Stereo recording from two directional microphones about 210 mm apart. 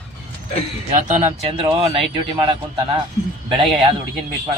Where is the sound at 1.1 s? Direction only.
30° right (ahead or behind).